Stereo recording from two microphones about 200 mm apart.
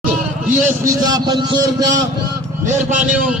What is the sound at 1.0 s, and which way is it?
Speech, 20° right (ahead or behind).